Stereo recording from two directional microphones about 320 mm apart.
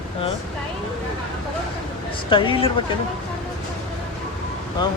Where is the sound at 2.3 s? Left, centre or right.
Centre.